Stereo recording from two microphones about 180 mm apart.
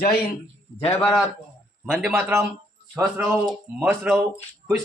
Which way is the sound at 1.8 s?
5° right (ahead or behind).